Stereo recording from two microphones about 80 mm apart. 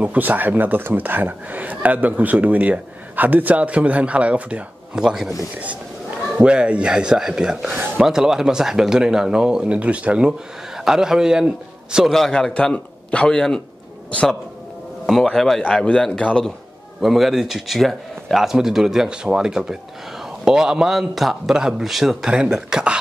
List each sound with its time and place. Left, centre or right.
0.0 s speech: centre
5.6 s a sound: centre
6.3 s speech: centre
12.1 s a man's voice: centre
15.2 s a man's voice: centre
17.0 s speech: centre